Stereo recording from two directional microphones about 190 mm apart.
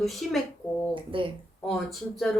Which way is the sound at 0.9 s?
25° right (ahead or behind).